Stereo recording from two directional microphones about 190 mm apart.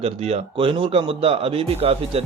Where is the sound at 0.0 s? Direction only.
30° right (ahead or behind).